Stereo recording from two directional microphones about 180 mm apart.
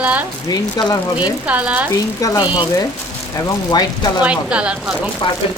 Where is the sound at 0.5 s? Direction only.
25° left (ahead or behind).